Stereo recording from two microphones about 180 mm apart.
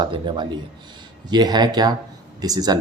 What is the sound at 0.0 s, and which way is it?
Speech, 25° right (ahead or behind).